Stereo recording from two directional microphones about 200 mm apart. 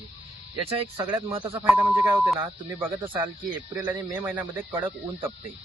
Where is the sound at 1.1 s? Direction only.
25° right (ahead or behind).